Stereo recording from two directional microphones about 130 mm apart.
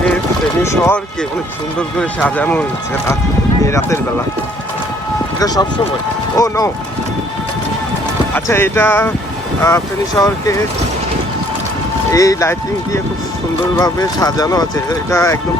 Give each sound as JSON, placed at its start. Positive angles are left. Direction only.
{"t": 0.6, "sound": "speech", "side_deg": 20}
{"t": 2.0, "sound": "speech", "side_deg": 10}
{"t": 3.7, "sound": "speech", "side_deg": 20}
{"t": 6.3, "sound": "speech", "side_deg": 25}
{"t": 8.3, "sound": "speech", "side_deg": 15}
{"t": 12.1, "sound": "speech", "side_deg": 25}